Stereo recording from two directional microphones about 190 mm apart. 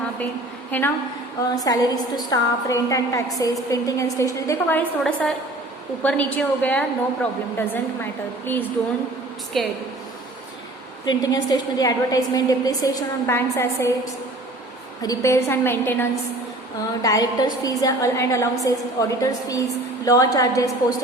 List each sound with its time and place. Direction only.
0.7 s a woman's voice: 10° left (ahead or behind)
1.6 s a woman's voice: 20° left (ahead or behind)
8.4 s a woman's voice: 10° left (ahead or behind)
11.0 s a woman's voice: 20° left (ahead or behind)
15.0 s a woman's voice: 15° left (ahead or behind)